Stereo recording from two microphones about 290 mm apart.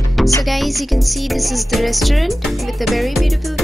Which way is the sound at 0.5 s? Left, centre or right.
Centre.